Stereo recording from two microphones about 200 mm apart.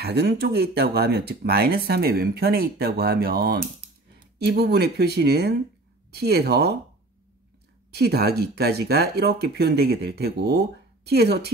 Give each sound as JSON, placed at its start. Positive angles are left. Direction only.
{"t": 0.0, "sound": "speech", "side_deg": -55}
{"t": 7.9, "sound": "speech", "side_deg": -50}